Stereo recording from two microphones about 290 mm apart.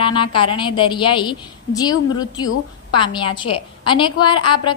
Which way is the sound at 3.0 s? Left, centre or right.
Centre.